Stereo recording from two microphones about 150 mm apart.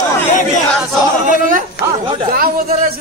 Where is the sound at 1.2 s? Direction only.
60° right (ahead or behind).